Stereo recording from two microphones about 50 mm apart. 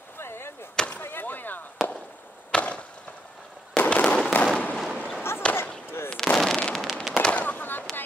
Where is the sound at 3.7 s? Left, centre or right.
Left.